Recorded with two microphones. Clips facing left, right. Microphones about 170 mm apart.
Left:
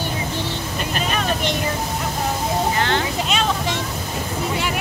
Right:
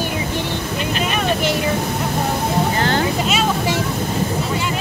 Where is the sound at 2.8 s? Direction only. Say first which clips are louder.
Right 2 dB; 40° right (ahead or behind).